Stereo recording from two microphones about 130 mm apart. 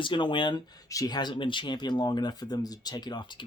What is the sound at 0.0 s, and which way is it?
Speech, 40° left (ahead or behind).